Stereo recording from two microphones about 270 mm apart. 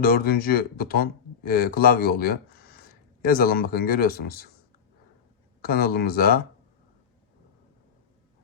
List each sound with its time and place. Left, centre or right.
0.0 s speech: left
5.6 s speech: left